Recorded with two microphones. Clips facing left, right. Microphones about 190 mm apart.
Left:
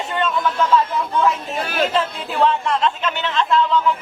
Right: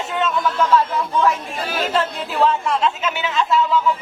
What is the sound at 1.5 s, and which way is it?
Speech, 55° left (ahead or behind).